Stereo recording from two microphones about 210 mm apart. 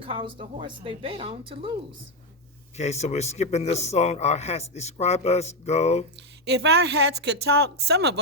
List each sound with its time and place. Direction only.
0.0 s a woman's voice: 25° right (ahead or behind)
2.7 s a man's voice: 30° left (ahead or behind)
6.1 s a woman's voice: 55° right (ahead or behind)